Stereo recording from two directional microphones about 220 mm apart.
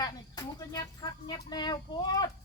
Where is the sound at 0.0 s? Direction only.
15° left (ahead or behind).